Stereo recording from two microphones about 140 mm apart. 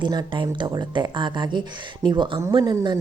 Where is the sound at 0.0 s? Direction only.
30° right (ahead or behind).